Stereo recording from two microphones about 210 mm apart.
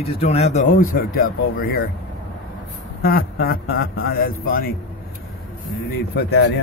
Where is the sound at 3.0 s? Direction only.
45° left (ahead or behind).